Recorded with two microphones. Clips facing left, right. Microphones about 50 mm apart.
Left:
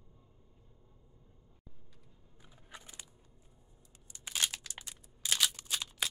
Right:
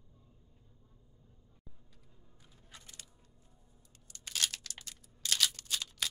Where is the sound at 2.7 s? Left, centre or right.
Centre.